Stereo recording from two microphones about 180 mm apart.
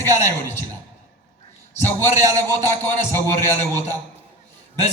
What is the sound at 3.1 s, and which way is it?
Speech, 15° left (ahead or behind).